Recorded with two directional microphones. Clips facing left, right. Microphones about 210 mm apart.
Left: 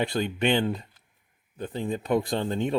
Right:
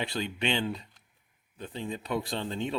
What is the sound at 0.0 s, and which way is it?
Speech, 50° left (ahead or behind).